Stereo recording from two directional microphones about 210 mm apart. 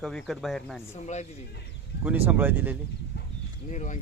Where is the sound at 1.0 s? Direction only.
30° left (ahead or behind).